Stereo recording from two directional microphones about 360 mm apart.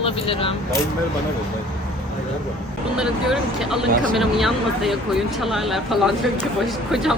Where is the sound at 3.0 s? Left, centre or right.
Centre.